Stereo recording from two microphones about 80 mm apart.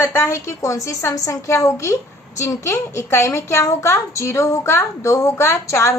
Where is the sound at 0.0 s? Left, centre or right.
Left.